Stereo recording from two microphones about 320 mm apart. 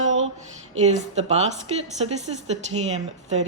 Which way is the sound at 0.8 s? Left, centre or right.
Right.